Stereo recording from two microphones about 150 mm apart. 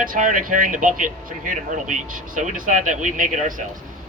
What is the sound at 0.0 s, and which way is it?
Speech, 65° right (ahead or behind).